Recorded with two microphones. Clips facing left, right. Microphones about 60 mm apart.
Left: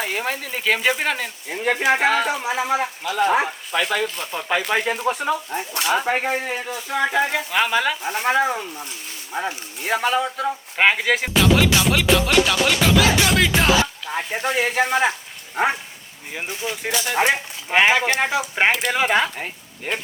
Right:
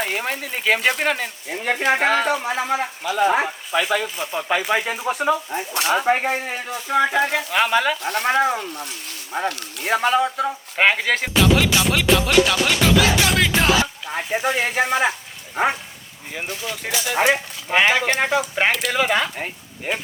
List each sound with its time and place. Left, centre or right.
0.1 s speech: centre
9.5 s speech: right
9.8 s speech: centre
16.5 s speech: centre
17.0 s speech: centre
18.6 s speech: centre
19.4 s speech: centre